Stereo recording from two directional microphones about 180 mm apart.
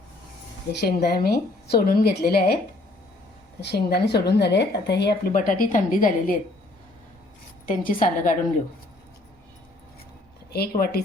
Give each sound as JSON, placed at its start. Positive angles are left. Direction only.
{"t": 0.8, "sound": "speech", "side_deg": 60}
{"t": 3.6, "sound": "speech", "side_deg": 65}
{"t": 7.7, "sound": "a woman's voice", "side_deg": 50}
{"t": 10.5, "sound": "speech", "side_deg": 60}